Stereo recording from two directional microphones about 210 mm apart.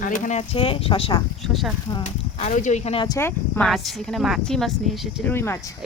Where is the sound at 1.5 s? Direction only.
Centre (ahead or behind).